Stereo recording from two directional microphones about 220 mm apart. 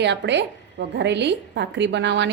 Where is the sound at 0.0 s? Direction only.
50° right (ahead or behind).